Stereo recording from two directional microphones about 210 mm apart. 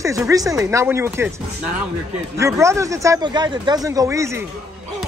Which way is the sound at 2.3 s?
15° right (ahead or behind).